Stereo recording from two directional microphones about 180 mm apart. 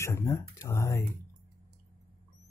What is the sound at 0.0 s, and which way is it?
Speech, 15° left (ahead or behind).